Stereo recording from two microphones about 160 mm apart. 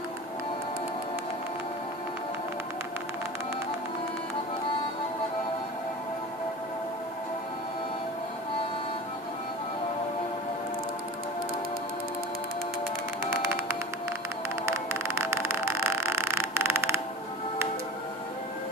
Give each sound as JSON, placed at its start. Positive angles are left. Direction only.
{"t": 13.2, "sound": "music", "side_deg": -15}